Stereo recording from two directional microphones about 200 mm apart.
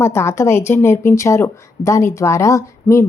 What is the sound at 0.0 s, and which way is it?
Speech, 10° left (ahead or behind).